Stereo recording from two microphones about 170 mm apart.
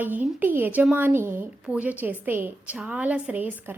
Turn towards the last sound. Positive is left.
turn(degrees=-10)  # may be behind; listen again after turning